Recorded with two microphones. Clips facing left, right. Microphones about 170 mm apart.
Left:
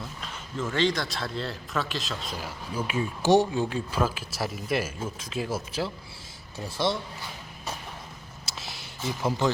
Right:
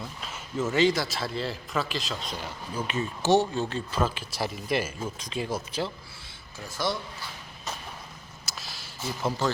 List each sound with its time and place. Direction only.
0.2 s speech: 5° right (ahead or behind)
6.6 s speech: 25° left (ahead or behind)
8.4 s a sound: 25° left (ahead or behind)
9.0 s speech: 15° left (ahead or behind)